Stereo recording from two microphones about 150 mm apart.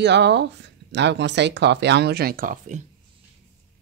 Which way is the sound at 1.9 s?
90° right.